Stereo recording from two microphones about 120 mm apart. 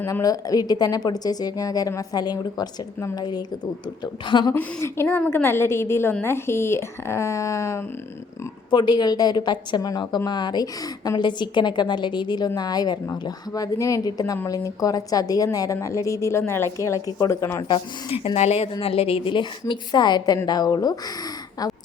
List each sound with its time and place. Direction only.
0.0 s a woman's voice: 30° left (ahead or behind)
4.5 s a woman's voice: 20° left (ahead or behind)
8.7 s a woman's voice: 40° left (ahead or behind)
17.6 s a woman's voice: 45° left (ahead or behind)